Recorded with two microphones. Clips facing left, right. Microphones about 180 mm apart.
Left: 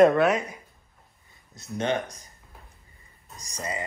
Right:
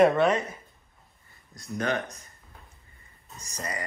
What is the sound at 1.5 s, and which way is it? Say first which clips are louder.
Speech: left 2 dB; 25° left (ahead or behind).